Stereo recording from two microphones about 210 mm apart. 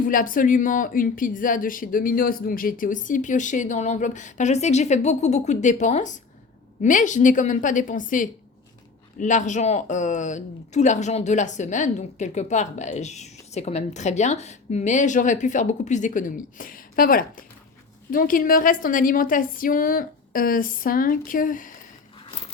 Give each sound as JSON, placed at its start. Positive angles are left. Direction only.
{"t": 0.0, "sound": "speech", "side_deg": 40}